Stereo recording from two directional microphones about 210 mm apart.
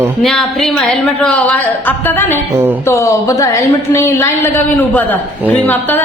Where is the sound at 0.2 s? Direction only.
Centre (ahead or behind).